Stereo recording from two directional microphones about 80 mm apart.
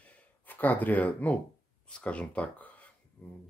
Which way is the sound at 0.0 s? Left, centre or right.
Left.